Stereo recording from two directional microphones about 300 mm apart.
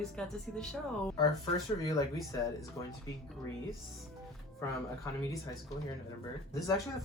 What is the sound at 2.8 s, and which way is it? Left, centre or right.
Speech, centre.